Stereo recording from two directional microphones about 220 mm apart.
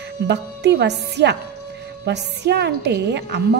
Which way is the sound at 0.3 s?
50° right (ahead or behind).